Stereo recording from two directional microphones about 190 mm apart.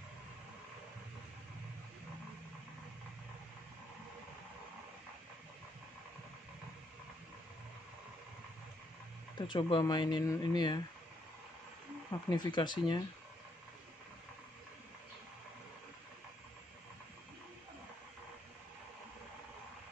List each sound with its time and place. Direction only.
9.5 s speech: 25° left (ahead or behind)
12.1 s speech: 20° left (ahead or behind)